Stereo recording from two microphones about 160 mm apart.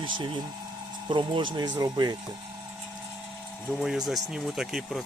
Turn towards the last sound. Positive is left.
turn(degrees=0)  # may be behind; listen again after turning